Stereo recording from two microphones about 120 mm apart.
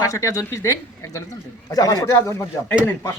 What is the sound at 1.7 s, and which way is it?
Speech, 30° left (ahead or behind).